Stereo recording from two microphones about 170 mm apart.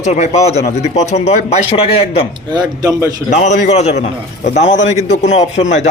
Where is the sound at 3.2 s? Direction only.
45° left (ahead or behind).